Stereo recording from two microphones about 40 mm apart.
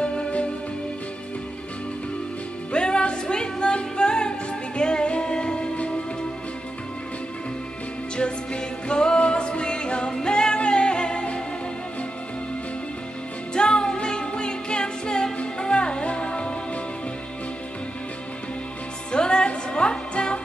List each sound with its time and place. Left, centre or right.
0.0 s music: left
2.7 s music: left
8.2 s music: left
13.6 s music: left
19.1 s music: left